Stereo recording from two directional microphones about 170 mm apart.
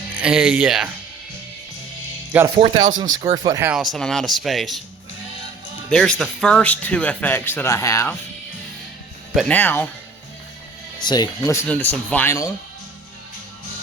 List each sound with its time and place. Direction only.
0.2 s speech: 5° right (ahead or behind)
2.6 s speech: 30° right (ahead or behind)
3.7 s speech: centre (ahead or behind)
5.9 s speech: 5° left (ahead or behind)
9.3 s speech: centre (ahead or behind)
9.6 s speech: 10° left (ahead or behind)
11.0 s speech: 25° left (ahead or behind)